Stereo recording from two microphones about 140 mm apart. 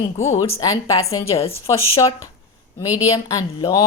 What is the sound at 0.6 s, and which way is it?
Speech, 25° left (ahead or behind).